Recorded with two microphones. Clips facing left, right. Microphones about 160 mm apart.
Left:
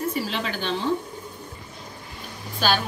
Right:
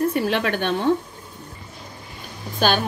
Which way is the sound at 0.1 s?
60° right (ahead or behind).